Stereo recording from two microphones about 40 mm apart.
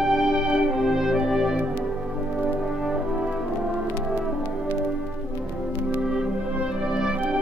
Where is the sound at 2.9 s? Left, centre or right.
Centre.